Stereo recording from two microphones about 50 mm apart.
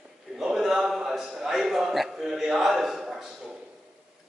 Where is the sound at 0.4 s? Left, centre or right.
Centre.